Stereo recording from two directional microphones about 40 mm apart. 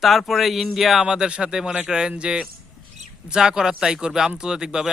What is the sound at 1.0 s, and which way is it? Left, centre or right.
A man's voice, right.